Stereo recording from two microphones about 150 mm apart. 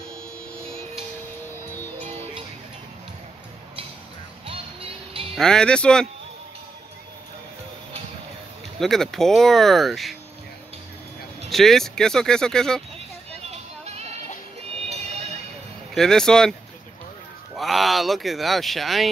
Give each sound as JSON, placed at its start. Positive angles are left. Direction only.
{"t": 1.7, "sound": "music", "side_deg": 15}
{"t": 5.3, "sound": "speech", "side_deg": 5}
{"t": 8.7, "sound": "speech", "side_deg": 0}
{"t": 11.4, "sound": "speech", "side_deg": 0}
{"t": 13.4, "sound": "music", "side_deg": -45}
{"t": 15.9, "sound": "speech", "side_deg": 5}
{"t": 17.6, "sound": "speech", "side_deg": 0}